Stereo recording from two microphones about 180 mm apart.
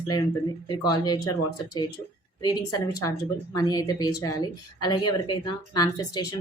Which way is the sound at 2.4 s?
20° left (ahead or behind).